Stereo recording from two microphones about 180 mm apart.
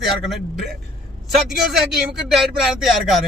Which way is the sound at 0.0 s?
Centre (ahead or behind).